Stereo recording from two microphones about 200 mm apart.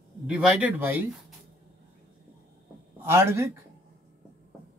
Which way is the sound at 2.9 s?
10° right (ahead or behind).